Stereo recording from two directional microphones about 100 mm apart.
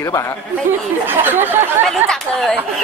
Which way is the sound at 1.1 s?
20° right (ahead or behind).